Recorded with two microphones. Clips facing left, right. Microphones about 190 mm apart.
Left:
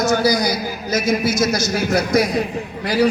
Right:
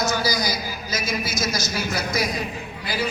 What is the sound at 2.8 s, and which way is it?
Speech, 75° left (ahead or behind).